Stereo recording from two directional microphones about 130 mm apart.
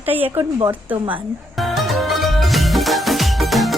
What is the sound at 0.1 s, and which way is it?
Speech, 15° right (ahead or behind).